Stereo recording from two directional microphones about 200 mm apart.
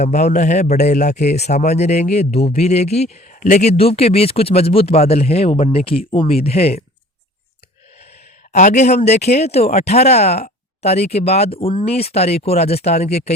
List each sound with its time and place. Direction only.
0.0 s a man's voice: 35° left (ahead or behind)
8.5 s a man's voice: 35° left (ahead or behind)